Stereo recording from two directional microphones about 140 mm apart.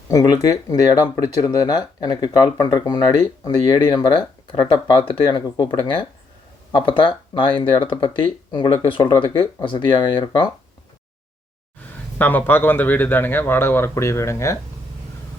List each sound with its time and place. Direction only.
0.1 s speech: 25° left (ahead or behind)
12.2 s speech: 15° left (ahead or behind)